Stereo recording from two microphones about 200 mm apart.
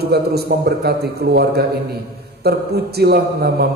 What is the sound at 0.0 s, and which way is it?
A man's voice, 50° right (ahead or behind).